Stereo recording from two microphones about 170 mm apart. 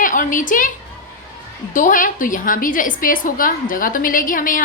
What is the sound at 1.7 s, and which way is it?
A woman's voice, 50° left (ahead or behind).